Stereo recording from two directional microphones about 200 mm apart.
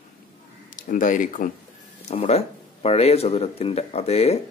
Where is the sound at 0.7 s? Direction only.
40° left (ahead or behind).